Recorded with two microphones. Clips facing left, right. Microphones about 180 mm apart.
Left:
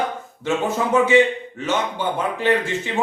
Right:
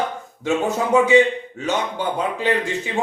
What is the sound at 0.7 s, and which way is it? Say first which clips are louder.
Speech: right 1 dB; 15° right (ahead or behind).